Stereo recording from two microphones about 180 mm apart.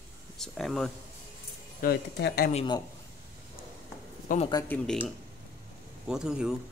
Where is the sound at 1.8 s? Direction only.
60° left (ahead or behind).